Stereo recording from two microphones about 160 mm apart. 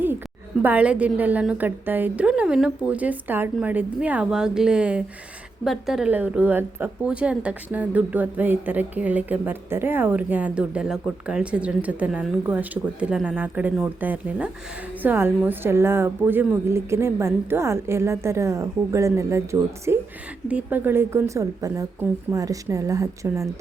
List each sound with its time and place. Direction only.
0.6 s a woman's voice: 10° right (ahead or behind)